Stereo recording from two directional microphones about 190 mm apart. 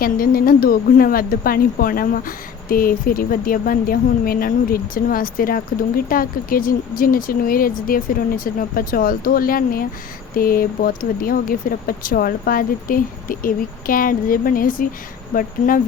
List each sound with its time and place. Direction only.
0.0 s speech: 50° left (ahead or behind)